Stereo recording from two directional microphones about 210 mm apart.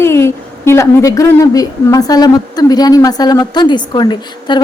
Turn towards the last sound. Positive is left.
turn(degrees=20)  # may be behind; listen again after turning